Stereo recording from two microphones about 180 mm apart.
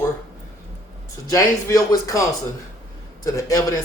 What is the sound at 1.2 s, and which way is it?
Speech, 20° left (ahead or behind).